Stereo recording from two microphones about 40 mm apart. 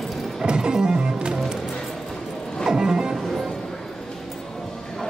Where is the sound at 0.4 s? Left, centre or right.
Centre.